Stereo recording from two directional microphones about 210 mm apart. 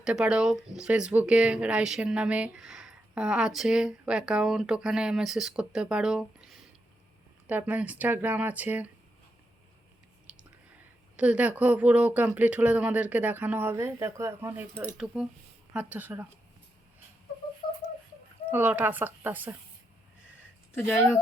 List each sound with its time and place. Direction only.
0.0 s speech: 5° right (ahead or behind)
7.4 s speech: 5° right (ahead or behind)
10.3 s whispering: 5° right (ahead or behind)
11.2 s speech: 5° right (ahead or behind)
18.5 s speech: 10° right (ahead or behind)